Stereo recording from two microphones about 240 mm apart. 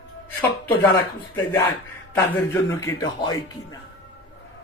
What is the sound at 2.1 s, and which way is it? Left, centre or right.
Speech, centre.